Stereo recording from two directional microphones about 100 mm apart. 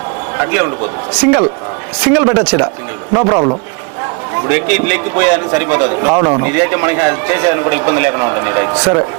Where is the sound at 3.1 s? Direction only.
35° right (ahead or behind).